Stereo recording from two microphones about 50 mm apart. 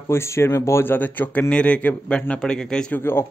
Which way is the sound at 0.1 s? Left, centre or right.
Left.